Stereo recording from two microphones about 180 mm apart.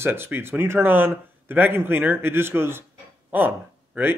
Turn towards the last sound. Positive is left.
turn(degrees=-10)  # may be behind; listen again after turning